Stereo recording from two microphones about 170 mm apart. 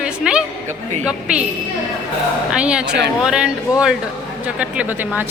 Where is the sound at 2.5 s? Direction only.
5° right (ahead or behind).